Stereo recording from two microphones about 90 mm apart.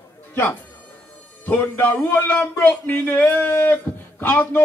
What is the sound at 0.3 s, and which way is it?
A man's voice, 20° left (ahead or behind).